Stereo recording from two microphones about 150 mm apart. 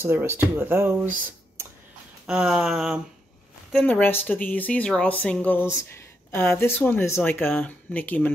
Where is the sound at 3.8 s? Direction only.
15° left (ahead or behind).